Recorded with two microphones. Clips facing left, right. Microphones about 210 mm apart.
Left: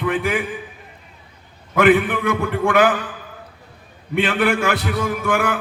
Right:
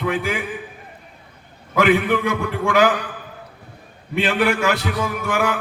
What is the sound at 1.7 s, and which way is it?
A man's voice, 55° left (ahead or behind).